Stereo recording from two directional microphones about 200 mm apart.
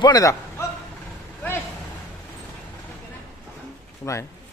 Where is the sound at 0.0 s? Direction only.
20° left (ahead or behind).